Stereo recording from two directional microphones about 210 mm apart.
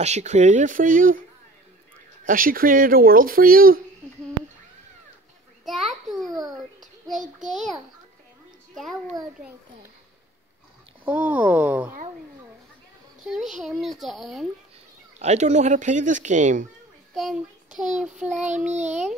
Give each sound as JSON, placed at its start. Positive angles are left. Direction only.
{"t": 0.0, "sound": "speech", "side_deg": -30}
{"t": 2.2, "sound": "speech", "side_deg": -40}
{"t": 5.7, "sound": "a sound", "side_deg": 0}
{"t": 11.1, "sound": "speech", "side_deg": -5}
{"t": 13.3, "sound": "a child's voice", "side_deg": 0}
{"t": 15.1, "sound": "speech", "side_deg": -35}
{"t": 17.1, "sound": "child singing", "side_deg": 0}
{"t": 18.0, "sound": "a child's voice", "side_deg": -5}